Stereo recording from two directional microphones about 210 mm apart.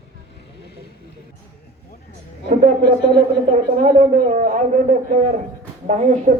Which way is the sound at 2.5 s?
35° right (ahead or behind).